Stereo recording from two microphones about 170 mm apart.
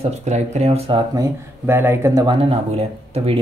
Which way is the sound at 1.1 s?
15° right (ahead or behind).